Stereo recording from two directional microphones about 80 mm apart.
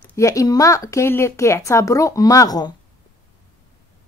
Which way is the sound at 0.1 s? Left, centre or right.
Left.